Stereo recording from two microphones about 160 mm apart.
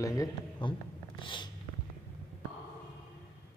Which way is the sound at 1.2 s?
30° left (ahead or behind).